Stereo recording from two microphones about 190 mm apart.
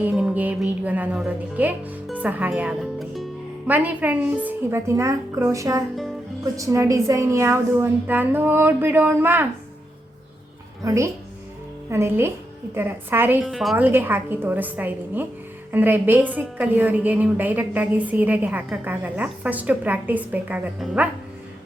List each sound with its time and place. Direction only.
0.0 s speech: 5° right (ahead or behind)
10.8 s speech: 15° right (ahead or behind)
13.4 s speech: centre (ahead or behind)